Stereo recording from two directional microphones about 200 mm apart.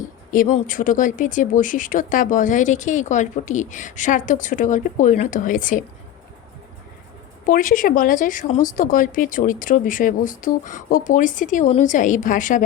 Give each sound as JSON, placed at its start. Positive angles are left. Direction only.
{"t": 0.3, "sound": "speech", "side_deg": 40}
{"t": 7.4, "sound": "speech", "side_deg": 45}